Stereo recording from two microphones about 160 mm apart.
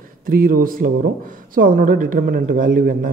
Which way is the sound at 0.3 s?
65° right (ahead or behind).